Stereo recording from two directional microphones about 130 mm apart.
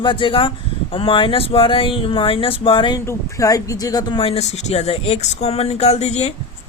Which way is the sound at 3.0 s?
20° left (ahead or behind).